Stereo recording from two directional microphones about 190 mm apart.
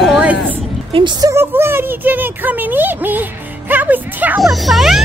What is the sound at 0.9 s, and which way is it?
Speech, 30° right (ahead or behind).